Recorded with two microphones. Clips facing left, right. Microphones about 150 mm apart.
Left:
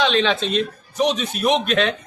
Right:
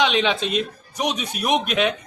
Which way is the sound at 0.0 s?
15° right (ahead or behind).